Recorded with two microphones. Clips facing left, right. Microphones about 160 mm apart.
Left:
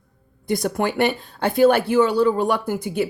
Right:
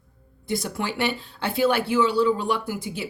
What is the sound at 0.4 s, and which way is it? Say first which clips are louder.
Speech: left 6 dB; 50° left (ahead or behind).